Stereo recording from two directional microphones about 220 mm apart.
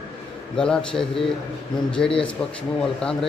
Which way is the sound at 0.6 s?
5° left (ahead or behind).